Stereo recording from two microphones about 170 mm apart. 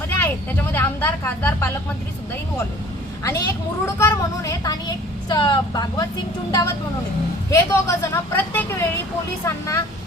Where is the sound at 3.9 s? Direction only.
15° left (ahead or behind).